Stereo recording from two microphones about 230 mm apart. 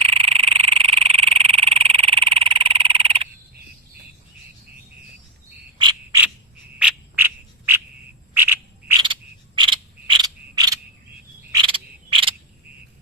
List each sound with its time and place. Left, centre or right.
0.0 s frog: right
5.8 s frog: centre
6.7 s frog: centre
9.6 s a sound: right
11.5 s frog: right